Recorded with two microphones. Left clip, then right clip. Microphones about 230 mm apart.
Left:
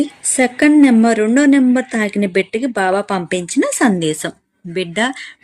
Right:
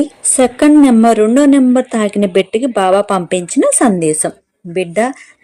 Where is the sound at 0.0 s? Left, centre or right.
Centre.